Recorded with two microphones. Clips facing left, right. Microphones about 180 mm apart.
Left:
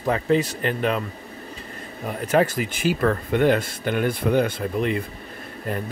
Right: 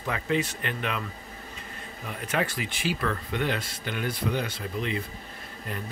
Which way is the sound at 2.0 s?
40° left (ahead or behind).